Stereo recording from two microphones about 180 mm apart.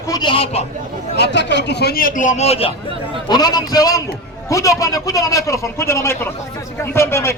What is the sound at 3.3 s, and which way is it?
A man's voice, 20° left (ahead or behind).